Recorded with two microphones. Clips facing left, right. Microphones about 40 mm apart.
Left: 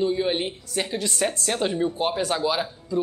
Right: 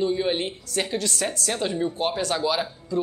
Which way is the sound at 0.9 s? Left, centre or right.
Left.